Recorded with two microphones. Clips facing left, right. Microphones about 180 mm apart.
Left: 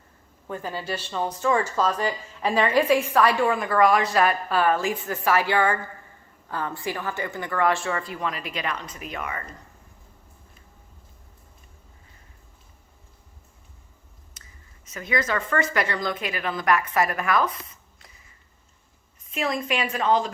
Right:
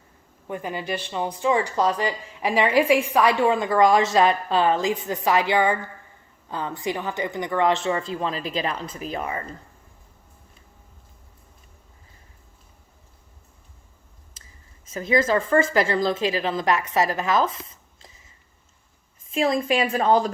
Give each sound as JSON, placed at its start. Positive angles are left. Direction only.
{"t": 0.4, "sound": "a woman's voice", "side_deg": -15}
{"t": 14.9, "sound": "a woman's voice", "side_deg": -30}
{"t": 19.3, "sound": "a woman's voice", "side_deg": -30}